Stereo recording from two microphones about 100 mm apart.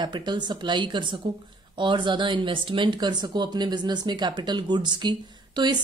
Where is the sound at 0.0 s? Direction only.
50° right (ahead or behind).